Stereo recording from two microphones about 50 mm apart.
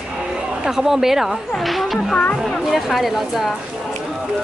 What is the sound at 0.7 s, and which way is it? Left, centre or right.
Speech, centre.